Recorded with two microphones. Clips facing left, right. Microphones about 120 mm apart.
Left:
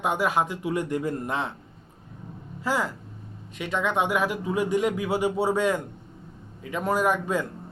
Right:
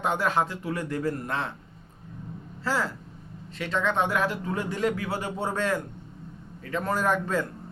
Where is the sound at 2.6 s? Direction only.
15° left (ahead or behind).